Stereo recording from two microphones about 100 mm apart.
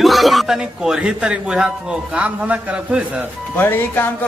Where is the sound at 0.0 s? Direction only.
Centre (ahead or behind).